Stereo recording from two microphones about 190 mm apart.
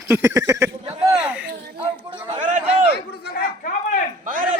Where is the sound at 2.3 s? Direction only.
40° right (ahead or behind).